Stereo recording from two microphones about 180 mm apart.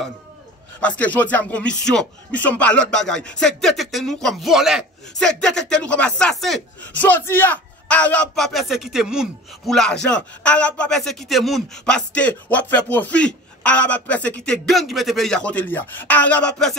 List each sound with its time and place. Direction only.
0.7 s speech: 5° left (ahead or behind)